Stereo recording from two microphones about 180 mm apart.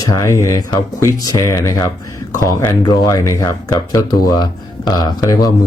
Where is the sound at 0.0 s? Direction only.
20° left (ahead or behind).